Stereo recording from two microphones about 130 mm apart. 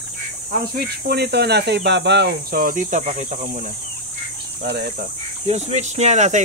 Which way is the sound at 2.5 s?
85° right.